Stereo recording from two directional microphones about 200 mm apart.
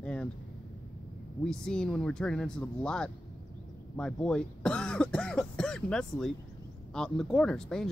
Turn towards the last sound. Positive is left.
turn(degrees=5)  # may be behind; listen again after turning